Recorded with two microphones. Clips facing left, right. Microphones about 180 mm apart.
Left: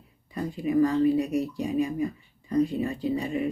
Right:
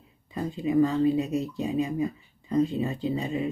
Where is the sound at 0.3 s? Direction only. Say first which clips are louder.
Even; 20° right (ahead or behind).